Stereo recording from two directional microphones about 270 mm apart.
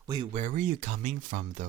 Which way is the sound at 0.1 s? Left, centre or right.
Right.